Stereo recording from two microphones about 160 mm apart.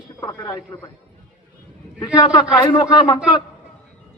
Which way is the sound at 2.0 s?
25° left (ahead or behind).